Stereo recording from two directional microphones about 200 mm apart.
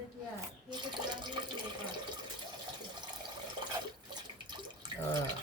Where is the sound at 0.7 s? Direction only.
20° right (ahead or behind).